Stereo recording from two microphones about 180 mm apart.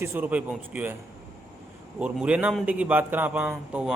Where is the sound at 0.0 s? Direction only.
10° right (ahead or behind).